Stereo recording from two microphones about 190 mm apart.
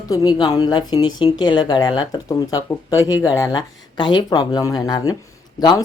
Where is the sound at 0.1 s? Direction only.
20° left (ahead or behind).